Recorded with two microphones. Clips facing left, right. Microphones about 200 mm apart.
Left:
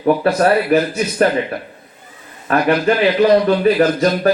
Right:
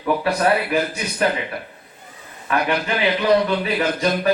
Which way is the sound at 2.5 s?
45° left (ahead or behind).